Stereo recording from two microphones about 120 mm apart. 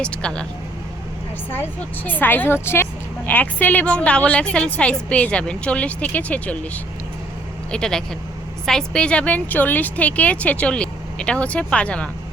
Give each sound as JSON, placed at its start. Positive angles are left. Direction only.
{"t": 0.0, "sound": "a woman's voice", "side_deg": 10}
{"t": 1.5, "sound": "a woman's voice", "side_deg": 15}
{"t": 7.7, "sound": "a woman's voice", "side_deg": 5}